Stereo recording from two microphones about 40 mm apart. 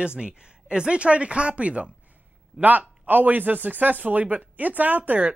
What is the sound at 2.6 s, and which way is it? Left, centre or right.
A man's voice, right.